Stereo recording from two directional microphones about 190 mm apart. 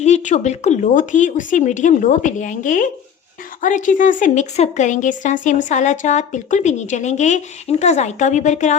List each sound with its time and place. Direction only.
0.0 s a woman's voice: 40° left (ahead or behind)